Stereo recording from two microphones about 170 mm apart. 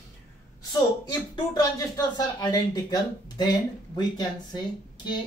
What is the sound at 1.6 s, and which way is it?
Speech, 20° left (ahead or behind).